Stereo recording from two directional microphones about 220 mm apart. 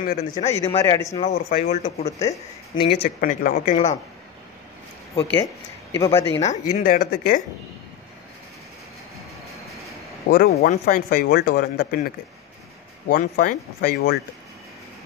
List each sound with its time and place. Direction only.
0.0 s a man's voice: 40° left (ahead or behind)
0.8 s speech: 15° left (ahead or behind)
1.3 s speech: 45° left (ahead or behind)
2.0 s speech: 15° left (ahead or behind)
2.9 s speech: 45° left (ahead or behind)
5.9 s speech: 15° left (ahead or behind)
6.4 s speech: 30° left (ahead or behind)
10.3 s speech: 45° left (ahead or behind)
13.1 s speech: 40° left (ahead or behind)